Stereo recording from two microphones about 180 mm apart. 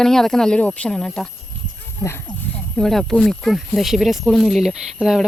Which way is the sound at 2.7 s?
Centre (ahead or behind).